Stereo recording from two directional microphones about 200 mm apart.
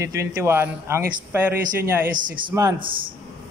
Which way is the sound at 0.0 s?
15° right (ahead or behind).